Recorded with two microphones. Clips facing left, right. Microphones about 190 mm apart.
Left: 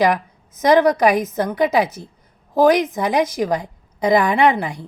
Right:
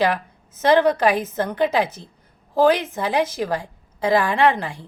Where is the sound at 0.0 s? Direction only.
15° left (ahead or behind).